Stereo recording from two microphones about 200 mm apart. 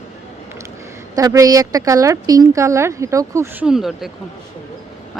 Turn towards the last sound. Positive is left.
turn(degrees=0)  # may be behind; listen again after turning